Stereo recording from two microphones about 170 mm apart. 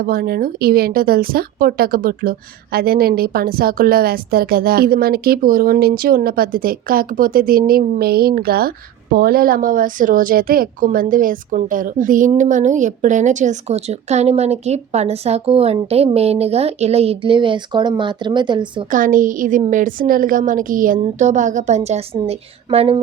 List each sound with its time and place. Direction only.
0.0 s a woman's voice: 60° right (ahead or behind); by 18.9 s 25° right (ahead or behind)
18.9 s a woman's voice: 50° right (ahead or behind); by 23.0 s 35° right (ahead or behind)